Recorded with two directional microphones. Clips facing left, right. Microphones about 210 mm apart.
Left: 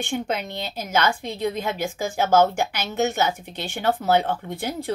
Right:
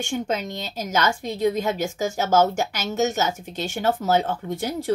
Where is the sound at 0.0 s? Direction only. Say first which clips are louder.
Right 1 dB; 45° right (ahead or behind).